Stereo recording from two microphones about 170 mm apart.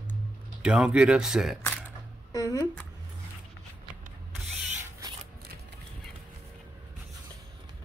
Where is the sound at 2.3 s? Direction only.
20° left (ahead or behind).